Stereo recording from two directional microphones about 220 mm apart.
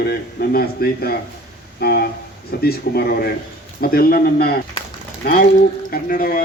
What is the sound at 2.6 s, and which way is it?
A man's voice, 45° left (ahead or behind).